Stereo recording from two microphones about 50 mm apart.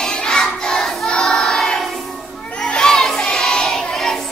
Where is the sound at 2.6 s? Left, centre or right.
Centre.